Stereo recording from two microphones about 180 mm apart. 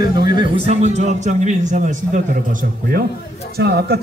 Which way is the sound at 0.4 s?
35° right (ahead or behind).